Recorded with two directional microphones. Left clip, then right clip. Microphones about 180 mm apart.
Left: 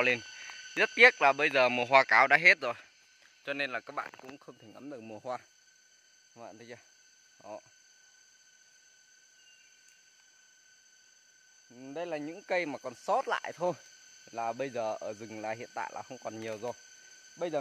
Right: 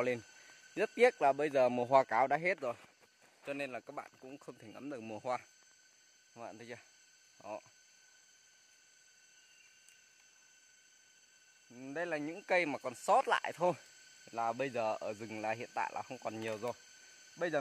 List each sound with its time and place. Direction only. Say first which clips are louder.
0.7 s speech: left 7 dB; centre (ahead or behind)
11.7 s speech: left 1 dB; 10° right (ahead or behind)